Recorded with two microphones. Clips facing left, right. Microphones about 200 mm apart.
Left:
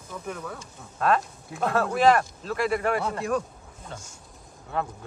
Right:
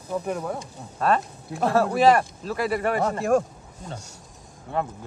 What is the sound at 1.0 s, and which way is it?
Speech, centre (ahead or behind).